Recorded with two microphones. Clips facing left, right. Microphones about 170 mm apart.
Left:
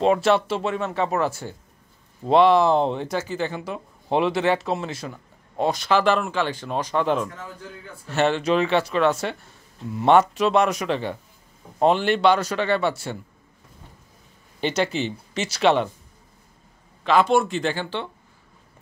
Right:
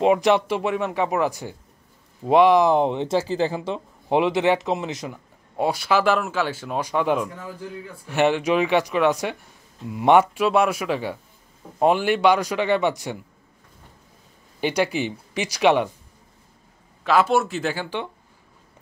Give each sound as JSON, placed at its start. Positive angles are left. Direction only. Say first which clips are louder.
{"t": 0.0, "sound": "speech", "louder": "right 1 dB", "side_deg": -15}
{"t": 3.2, "sound": "speech", "louder": "right 4 dB", "side_deg": -30}
{"t": 4.1, "sound": "speech", "louder": "right 2 dB", "side_deg": -15}
{"t": 14.6, "sound": "speech", "louder": "right 1 dB", "side_deg": -10}
{"t": 17.0, "sound": "speech", "louder": "left 1 dB", "side_deg": -5}